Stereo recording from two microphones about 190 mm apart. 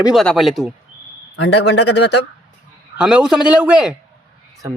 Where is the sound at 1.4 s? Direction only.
65° left (ahead or behind).